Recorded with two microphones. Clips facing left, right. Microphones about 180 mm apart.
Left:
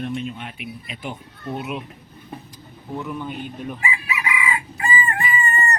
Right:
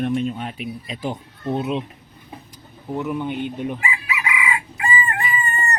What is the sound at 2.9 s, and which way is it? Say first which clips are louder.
Speech: right 5 dB; 20° right (ahead or behind).